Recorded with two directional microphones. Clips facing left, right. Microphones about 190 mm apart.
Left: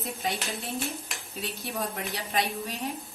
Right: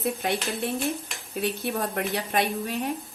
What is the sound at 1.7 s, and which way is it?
A woman's voice, 55° right (ahead or behind).